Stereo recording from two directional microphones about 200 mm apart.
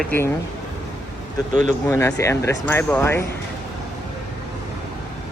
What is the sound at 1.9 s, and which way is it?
Speech, 15° left (ahead or behind).